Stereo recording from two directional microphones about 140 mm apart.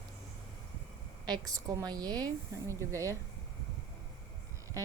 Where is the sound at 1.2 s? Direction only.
30° right (ahead or behind).